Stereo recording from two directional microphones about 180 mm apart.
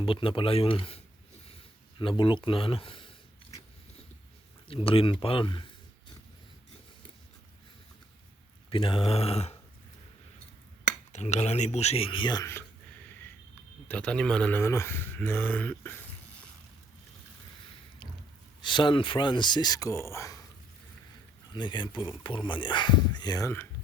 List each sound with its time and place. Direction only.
0.0 s speech: 30° left (ahead or behind)
1.5 s a sound: 30° left (ahead or behind)
4.7 s speech: 30° left (ahead or behind)
8.7 s speech: 30° left (ahead or behind)
11.1 s speech: 40° left (ahead or behind); by 12.6 s 15° left (ahead or behind)
13.8 s speech: 5° left (ahead or behind)
18.6 s speech: 25° left (ahead or behind)
21.5 s speech: 25° left (ahead or behind)